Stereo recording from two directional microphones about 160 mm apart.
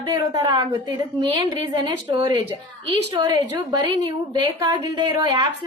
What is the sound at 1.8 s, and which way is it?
A woman's voice, 25° right (ahead or behind).